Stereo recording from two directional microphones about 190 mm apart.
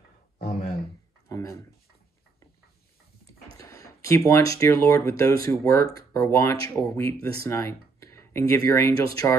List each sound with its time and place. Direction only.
1.3 s speech: 15° left (ahead or behind)
3.5 s a sound: 15° left (ahead or behind)
4.3 s speech: 15° left (ahead or behind)